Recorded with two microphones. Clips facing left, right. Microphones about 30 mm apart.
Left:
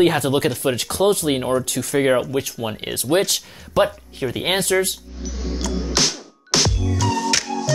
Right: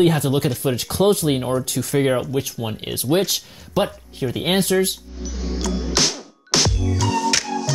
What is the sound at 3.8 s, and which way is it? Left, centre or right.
Speech, centre.